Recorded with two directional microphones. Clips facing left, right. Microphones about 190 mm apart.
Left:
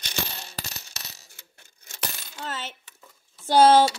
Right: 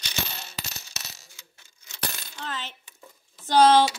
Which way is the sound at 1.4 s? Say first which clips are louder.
Left 1 dB; 50° left (ahead or behind).